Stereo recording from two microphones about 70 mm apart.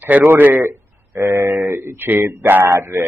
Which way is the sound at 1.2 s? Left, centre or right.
Right.